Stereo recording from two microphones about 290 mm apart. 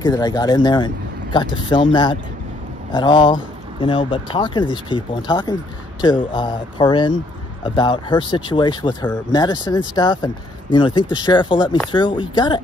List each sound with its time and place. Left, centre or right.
0.0 s speech: centre